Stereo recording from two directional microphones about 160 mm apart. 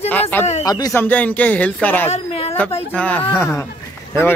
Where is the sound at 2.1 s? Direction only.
40° left (ahead or behind).